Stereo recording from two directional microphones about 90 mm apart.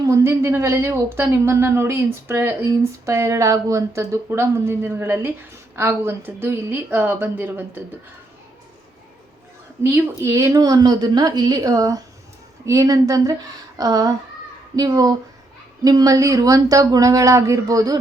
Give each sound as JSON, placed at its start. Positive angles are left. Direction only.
{"t": 0.0, "sound": "speech", "side_deg": -35}
{"t": 9.9, "sound": "a woman's voice", "side_deg": -30}